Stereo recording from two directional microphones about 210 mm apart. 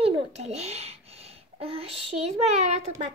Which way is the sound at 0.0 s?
30° right (ahead or behind).